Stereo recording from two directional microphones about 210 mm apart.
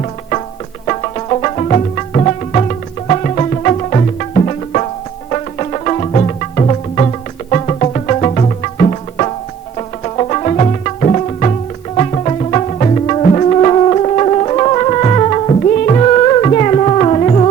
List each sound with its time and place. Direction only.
0.0 s music: 30° left (ahead or behind)